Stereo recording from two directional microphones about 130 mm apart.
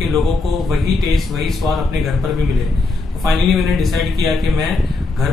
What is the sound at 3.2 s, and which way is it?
A man's voice, centre (ahead or behind).